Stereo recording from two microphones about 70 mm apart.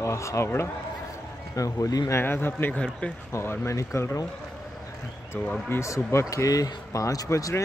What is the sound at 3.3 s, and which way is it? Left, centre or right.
Speech, left.